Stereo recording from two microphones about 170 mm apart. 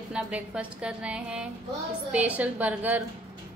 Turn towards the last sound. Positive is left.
turn(degrees=-10)  # may be behind; listen again after turning